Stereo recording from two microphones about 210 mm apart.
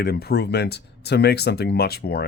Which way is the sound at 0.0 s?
50° left (ahead or behind).